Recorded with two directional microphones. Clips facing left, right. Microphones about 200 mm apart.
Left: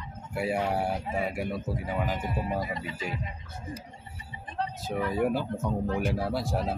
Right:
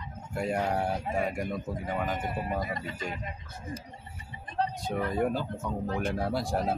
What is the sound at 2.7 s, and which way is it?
Speech, 45° right (ahead or behind).